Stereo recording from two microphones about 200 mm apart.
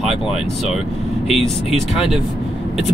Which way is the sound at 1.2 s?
Centre (ahead or behind).